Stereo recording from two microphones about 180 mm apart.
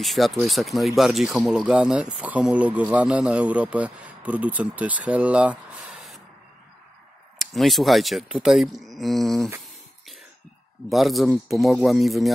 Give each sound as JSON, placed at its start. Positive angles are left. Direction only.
{"t": 0.0, "sound": "speech", "side_deg": 0}
{"t": 7.3, "sound": "speech", "side_deg": 0}
{"t": 10.9, "sound": "speech", "side_deg": 0}